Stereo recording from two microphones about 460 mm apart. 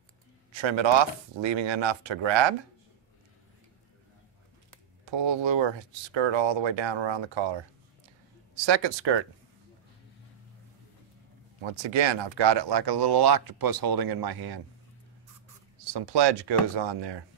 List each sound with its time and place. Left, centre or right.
0.6 s speech: right
5.1 s speech: right
8.6 s speech: right
11.6 s speech: right
15.9 s speech: right